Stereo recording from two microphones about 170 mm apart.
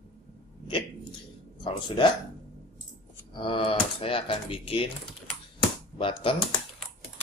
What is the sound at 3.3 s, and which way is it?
Speech, 30° left (ahead or behind).